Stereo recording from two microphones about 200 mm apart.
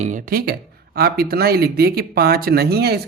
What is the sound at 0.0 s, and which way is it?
Speech, 40° right (ahead or behind).